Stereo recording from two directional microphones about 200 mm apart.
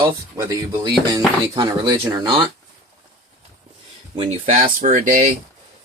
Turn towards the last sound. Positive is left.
turn(degrees=-40)  # may be behind; listen again after turning